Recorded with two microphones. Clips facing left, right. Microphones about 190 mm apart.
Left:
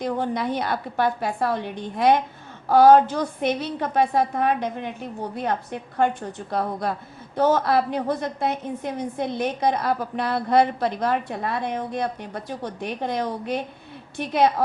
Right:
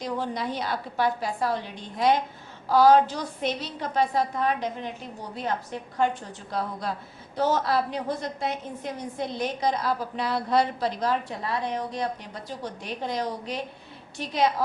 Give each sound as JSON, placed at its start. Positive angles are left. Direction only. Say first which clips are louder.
{"t": 0.0, "sound": "a woman's voice", "louder": "left 5 dB", "side_deg": 55}